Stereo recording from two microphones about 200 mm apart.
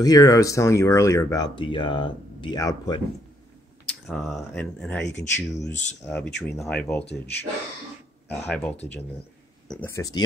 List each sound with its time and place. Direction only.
0.0 s speech: 20° left (ahead or behind)
3.8 s speech: centre (ahead or behind)
8.5 s speech: 5° left (ahead or behind)